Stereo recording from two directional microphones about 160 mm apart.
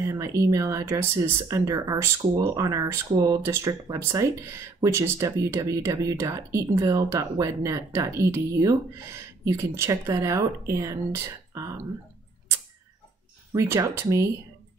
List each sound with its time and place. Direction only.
0.0 s speech: 20° right (ahead or behind)
13.5 s speech: 20° right (ahead or behind)